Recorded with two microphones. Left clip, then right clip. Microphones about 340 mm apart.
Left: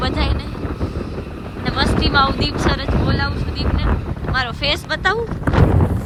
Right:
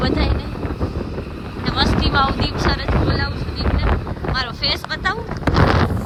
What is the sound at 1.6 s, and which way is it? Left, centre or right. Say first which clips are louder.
Speech: even; centre.